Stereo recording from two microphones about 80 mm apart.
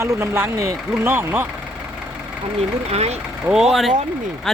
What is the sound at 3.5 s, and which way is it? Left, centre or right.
Speech, centre.